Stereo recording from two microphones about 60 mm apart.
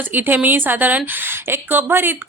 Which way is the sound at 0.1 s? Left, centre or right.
Right.